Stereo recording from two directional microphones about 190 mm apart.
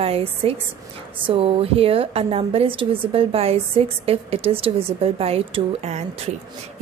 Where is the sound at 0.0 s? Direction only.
30° right (ahead or behind).